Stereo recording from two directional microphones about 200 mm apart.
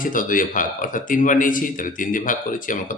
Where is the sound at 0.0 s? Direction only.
40° left (ahead or behind).